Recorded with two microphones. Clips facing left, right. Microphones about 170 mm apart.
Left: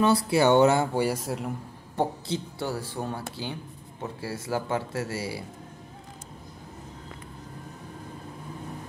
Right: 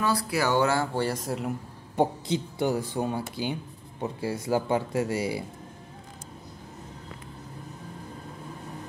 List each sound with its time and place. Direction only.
0.0 s speech: 25° left (ahead or behind); by 1.5 s centre (ahead or behind)
2.0 s speech: 15° right (ahead or behind)